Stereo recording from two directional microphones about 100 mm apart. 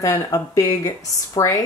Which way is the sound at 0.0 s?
35° left (ahead or behind).